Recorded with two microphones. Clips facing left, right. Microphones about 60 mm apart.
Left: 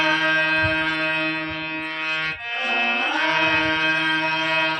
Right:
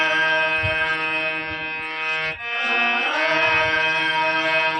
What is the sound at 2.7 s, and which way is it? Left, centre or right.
Music, right.